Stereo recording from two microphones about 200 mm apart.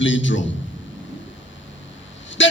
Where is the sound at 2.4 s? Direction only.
70° left (ahead or behind).